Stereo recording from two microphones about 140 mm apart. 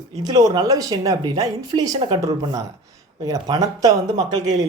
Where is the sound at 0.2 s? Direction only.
25° right (ahead or behind).